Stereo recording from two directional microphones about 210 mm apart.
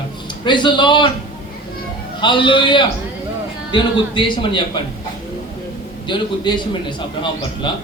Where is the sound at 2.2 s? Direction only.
20° left (ahead or behind).